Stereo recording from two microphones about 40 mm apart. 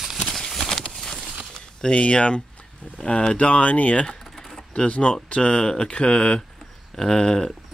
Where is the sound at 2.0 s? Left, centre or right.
Left.